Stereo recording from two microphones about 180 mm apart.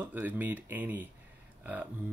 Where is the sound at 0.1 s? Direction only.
10° right (ahead or behind).